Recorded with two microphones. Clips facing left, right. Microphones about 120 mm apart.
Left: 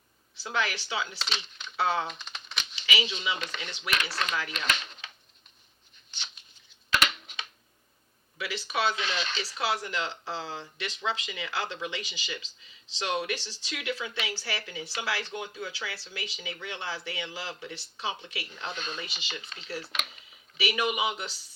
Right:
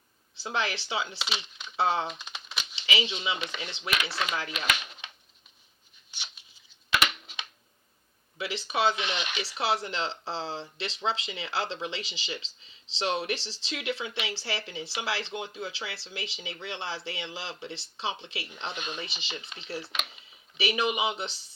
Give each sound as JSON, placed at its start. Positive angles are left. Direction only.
{"t": 0.4, "sound": "speech", "side_deg": -25}
{"t": 1.2, "sound": "speech", "side_deg": -10}
{"t": 1.7, "sound": "speech", "side_deg": -25}
{"t": 2.0, "sound": "typing", "side_deg": -10}
{"t": 2.7, "sound": "speech", "side_deg": -25}
{"t": 4.1, "sound": "speech", "side_deg": -5}
{"t": 8.4, "sound": "speech", "side_deg": -25}
{"t": 18.8, "sound": "speech", "side_deg": -15}
{"t": 19.0, "sound": "speech", "side_deg": -25}
{"t": 19.8, "sound": "speech", "side_deg": 0}
{"t": 20.6, "sound": "speech", "side_deg": -25}